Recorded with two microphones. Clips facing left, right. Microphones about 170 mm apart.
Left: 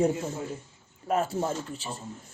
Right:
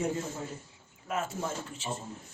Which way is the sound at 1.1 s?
35° left (ahead or behind).